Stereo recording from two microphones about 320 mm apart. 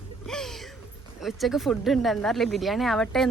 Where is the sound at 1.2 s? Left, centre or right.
Centre.